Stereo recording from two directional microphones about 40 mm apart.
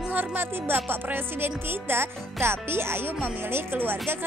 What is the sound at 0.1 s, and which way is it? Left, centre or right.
Speech, right.